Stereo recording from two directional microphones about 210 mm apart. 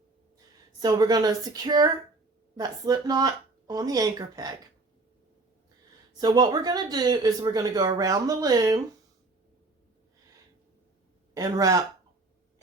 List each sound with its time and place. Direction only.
0.8 s speech: 20° right (ahead or behind)
6.1 s speech: 20° right (ahead or behind)
11.3 s speech: 15° right (ahead or behind)